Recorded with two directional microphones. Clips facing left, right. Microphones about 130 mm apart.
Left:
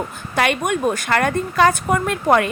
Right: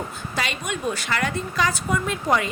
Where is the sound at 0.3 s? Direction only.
55° left (ahead or behind).